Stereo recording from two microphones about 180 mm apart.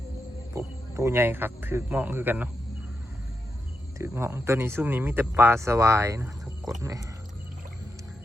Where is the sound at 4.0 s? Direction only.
15° right (ahead or behind).